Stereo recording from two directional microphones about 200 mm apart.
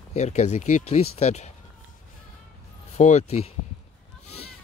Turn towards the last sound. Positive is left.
turn(degrees=30)  # may be behind; listen again after turning